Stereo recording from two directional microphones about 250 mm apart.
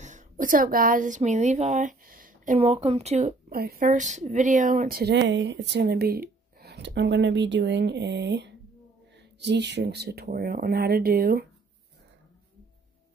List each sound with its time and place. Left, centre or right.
0.0 s speech: right